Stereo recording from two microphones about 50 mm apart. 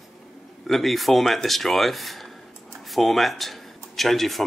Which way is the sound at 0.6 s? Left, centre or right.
Centre.